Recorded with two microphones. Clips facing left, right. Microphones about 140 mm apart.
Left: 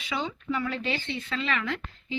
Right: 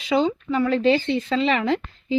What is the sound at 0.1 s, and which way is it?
Speech, 35° right (ahead or behind).